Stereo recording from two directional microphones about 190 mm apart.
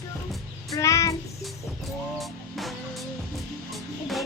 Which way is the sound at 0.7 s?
15° left (ahead or behind).